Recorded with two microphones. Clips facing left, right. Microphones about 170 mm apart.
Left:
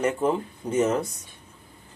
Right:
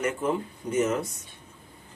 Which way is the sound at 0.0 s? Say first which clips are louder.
Left 3 dB; 30° left (ahead or behind).